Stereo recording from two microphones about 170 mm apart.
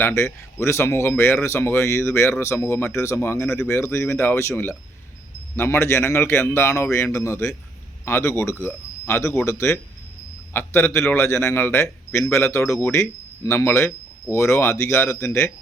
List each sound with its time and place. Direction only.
0.2 s a man's voice: 15° left (ahead or behind)